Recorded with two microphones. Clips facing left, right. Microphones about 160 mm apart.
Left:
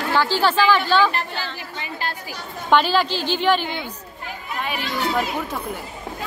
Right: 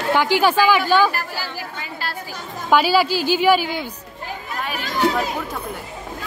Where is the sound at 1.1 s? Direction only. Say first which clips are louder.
Even; 25° left (ahead or behind).